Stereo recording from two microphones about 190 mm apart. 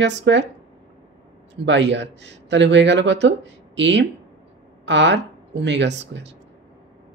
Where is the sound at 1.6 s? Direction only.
70° right (ahead or behind).